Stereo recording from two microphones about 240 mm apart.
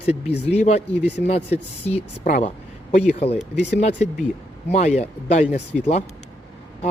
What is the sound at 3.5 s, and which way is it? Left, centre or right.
Speech, left.